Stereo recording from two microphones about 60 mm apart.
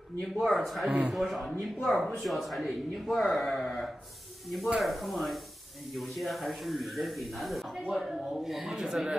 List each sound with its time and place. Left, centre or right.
0.2 s speech: centre
0.8 s speech: centre
1.1 s speech: centre